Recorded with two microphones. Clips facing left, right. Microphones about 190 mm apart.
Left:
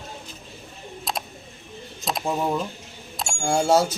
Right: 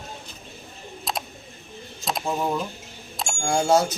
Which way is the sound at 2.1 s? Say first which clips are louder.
Left 1 dB; centre (ahead or behind).